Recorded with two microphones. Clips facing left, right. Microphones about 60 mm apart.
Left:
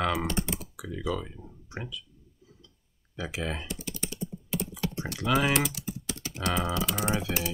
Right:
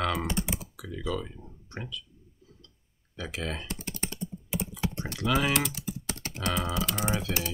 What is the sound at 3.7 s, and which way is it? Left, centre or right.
Computer keyboard, right.